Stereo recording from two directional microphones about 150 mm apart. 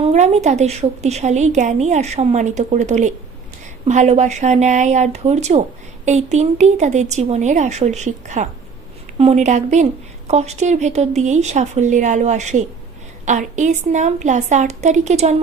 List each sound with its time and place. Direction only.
0.0 s a woman's voice: 45° right (ahead or behind)